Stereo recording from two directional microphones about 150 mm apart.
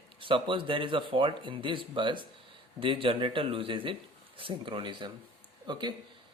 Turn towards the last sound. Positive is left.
turn(degrees=-30)  # may be behind; listen again after turning